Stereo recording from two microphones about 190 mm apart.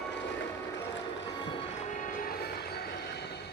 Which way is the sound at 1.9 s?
45° left (ahead or behind).